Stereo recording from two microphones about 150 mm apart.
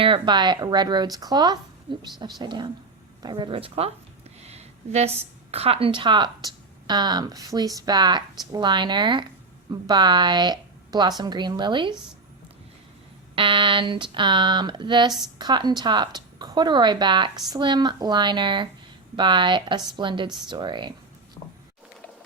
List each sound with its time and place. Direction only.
0.0 s speech: 35° right (ahead or behind)
13.3 s speech: 35° right (ahead or behind)